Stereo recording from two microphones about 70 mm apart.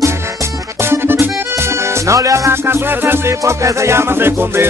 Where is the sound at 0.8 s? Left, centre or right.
Right.